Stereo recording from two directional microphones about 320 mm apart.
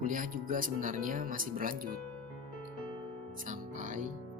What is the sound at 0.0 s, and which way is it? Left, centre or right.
Speech, right.